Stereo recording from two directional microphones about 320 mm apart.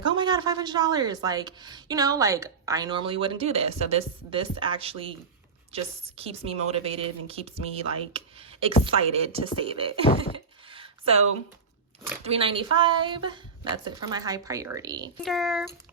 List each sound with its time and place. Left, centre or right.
0.0 s a woman's voice: centre
10.7 s a sound: centre
12.2 s a woman's voice: centre
15.2 s speech: centre